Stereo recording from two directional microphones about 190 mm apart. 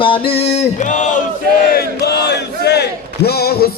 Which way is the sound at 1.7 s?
60° left (ahead or behind).